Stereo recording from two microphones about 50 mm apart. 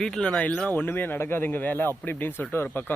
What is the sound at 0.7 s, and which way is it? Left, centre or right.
Speech, left.